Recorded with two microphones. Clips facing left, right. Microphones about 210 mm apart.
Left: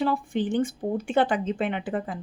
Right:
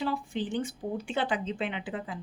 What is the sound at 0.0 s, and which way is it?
A woman's voice, 50° left (ahead or behind).